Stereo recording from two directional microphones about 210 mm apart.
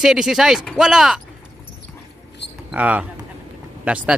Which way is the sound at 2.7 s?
5° right (ahead or behind).